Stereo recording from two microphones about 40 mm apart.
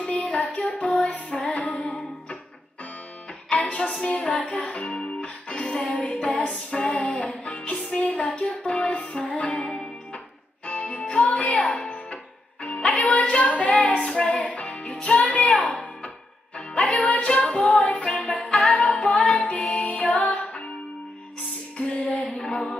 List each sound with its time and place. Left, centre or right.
0.4 s music: left
3.4 s music: left
4.6 s music: left
8.0 s a sound: left
8.6 s music: left
9.6 s music: left
10.7 s music: left
21.7 s music: left
22.4 s mantra: centre